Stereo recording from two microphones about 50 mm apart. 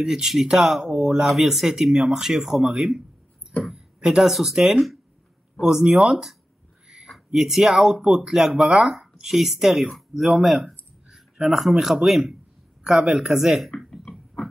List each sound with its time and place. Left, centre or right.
0.0 s speech: centre
3.7 s a sound: centre
4.2 s speech: centre
7.3 s speech: centre
10.4 s a sound: centre
11.3 s speech: centre